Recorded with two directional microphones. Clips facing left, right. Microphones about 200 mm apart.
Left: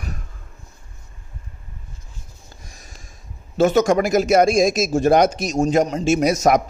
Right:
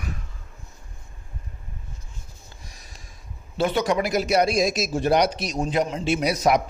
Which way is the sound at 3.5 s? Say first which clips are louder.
Left 7 dB; 45° left (ahead or behind).